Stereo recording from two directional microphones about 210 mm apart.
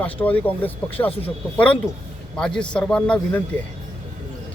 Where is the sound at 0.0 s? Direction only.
5° left (ahead or behind).